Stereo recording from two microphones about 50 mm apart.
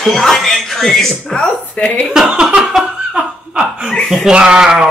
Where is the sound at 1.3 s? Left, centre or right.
Centre.